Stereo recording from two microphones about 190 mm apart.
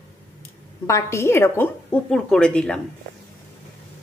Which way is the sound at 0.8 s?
15° left (ahead or behind).